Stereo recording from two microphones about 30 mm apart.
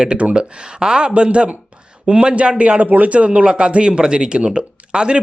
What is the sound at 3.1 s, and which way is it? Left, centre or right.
Speech, right.